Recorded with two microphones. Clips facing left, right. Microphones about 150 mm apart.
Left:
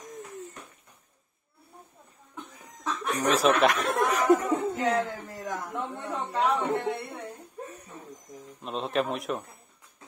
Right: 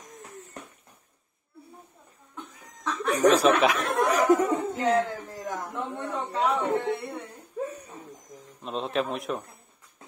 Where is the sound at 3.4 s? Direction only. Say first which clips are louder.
Right 1 dB; centre (ahead or behind).